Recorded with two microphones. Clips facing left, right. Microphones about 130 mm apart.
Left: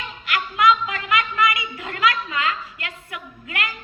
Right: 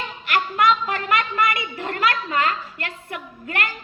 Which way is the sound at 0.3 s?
40° right (ahead or behind).